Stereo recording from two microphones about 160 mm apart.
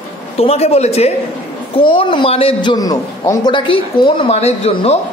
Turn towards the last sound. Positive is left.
turn(degrees=40)  # may be behind; listen again after turning